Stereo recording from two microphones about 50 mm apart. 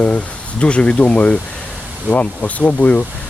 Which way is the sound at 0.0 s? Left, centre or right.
Left.